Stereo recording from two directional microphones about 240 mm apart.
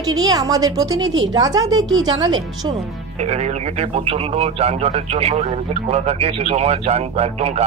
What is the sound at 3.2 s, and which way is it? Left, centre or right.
Speech, right.